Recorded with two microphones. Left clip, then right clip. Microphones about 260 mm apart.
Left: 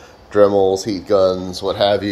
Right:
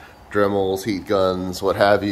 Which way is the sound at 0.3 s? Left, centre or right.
Centre.